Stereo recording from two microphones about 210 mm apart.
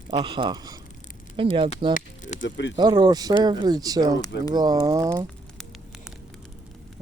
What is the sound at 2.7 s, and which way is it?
Speech, 20° right (ahead or behind).